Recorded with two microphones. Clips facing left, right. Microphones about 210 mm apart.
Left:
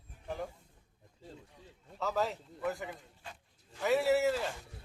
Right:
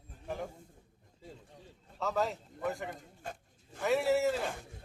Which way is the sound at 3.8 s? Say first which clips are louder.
Even; centre (ahead or behind).